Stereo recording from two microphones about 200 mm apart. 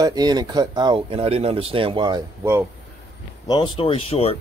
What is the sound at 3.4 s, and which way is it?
Speech, 20° left (ahead or behind).